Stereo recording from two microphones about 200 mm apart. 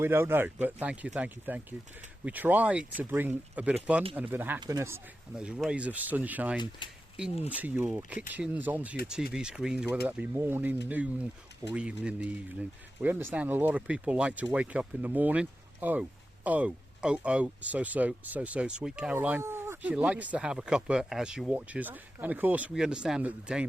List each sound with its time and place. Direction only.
0.0 s speech: 10° right (ahead or behind)
6.6 s speech: 25° left (ahead or behind)
7.5 s speech: 10° right (ahead or behind)